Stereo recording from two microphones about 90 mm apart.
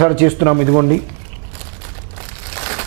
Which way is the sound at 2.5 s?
15° right (ahead or behind).